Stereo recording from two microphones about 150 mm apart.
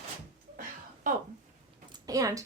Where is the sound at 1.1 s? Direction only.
65° right (ahead or behind).